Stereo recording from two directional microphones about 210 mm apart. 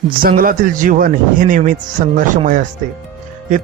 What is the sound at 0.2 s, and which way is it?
Speech, 45° right (ahead or behind).